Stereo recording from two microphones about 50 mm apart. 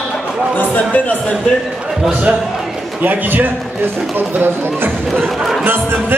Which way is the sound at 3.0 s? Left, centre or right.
Right.